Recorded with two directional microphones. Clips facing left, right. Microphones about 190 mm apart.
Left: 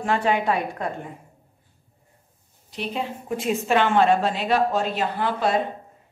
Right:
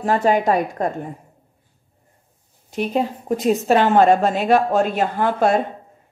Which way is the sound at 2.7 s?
45° right (ahead or behind).